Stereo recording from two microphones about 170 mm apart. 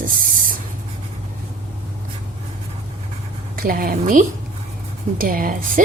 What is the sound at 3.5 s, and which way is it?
Speech, 55° right (ahead or behind).